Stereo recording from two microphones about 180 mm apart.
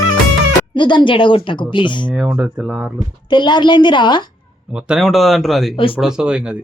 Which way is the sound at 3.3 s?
25° left (ahead or behind).